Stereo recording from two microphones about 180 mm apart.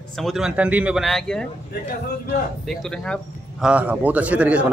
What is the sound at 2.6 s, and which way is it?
A man's voice, 5° left (ahead or behind).